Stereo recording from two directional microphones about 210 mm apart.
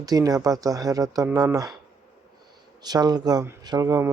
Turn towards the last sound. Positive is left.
turn(degrees=-15)  # may be behind; listen again after turning